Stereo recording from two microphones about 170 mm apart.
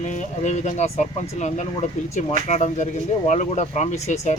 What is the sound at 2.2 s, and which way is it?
Speech, 40° left (ahead or behind).